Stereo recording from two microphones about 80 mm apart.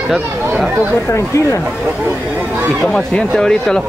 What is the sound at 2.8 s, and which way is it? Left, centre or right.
Speech, centre.